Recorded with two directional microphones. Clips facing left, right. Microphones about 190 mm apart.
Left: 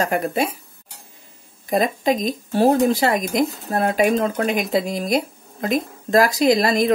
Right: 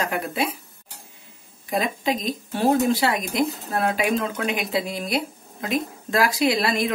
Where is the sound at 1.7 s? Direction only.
45° left (ahead or behind).